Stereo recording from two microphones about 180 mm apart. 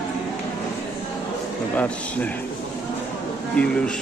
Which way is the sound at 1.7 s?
10° left (ahead or behind).